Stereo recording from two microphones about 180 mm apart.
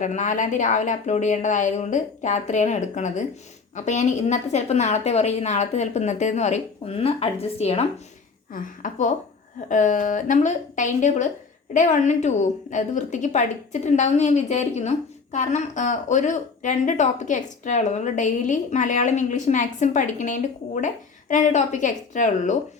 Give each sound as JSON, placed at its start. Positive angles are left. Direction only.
{"t": 0.0, "sound": "a woman's voice", "side_deg": 45}
{"t": 8.5, "sound": "a woman's voice", "side_deg": 45}